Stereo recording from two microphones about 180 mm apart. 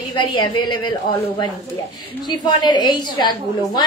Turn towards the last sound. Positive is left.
turn(degrees=25)  # may be behind; listen again after turning